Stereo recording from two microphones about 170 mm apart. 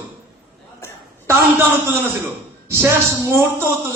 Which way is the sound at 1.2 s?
15° right (ahead or behind).